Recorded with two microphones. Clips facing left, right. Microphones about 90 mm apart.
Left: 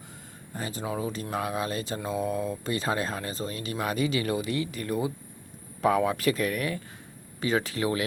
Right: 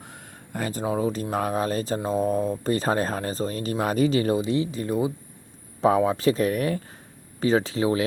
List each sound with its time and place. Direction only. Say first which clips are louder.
0.5 s speech: right 6 dB; 45° right (ahead or behind)
0.9 s speech: right 6 dB; 35° right (ahead or behind)